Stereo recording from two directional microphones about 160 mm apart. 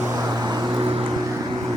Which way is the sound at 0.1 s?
25° right (ahead or behind).